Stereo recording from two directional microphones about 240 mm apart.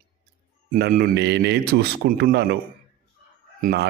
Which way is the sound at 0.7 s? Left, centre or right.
Right.